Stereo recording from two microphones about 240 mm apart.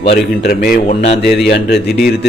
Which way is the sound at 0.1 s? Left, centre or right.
Left.